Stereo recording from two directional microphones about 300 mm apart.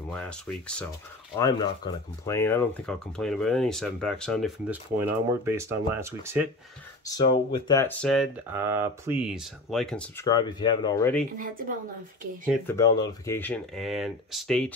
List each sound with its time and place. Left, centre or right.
0.1 s speech: centre
1.4 s speech: centre
7.1 s speech: centre
11.3 s speech: right
12.6 s speech: centre